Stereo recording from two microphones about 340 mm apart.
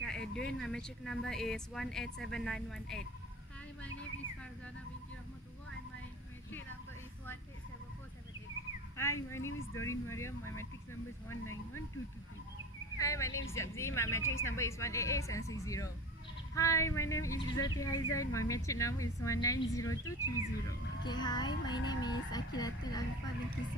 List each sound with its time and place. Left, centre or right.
0.0 s speech: centre
8.9 s a woman's voice: centre
9.4 s speech: left
9.8 s a woman's voice: centre
12.9 s a woman's voice: centre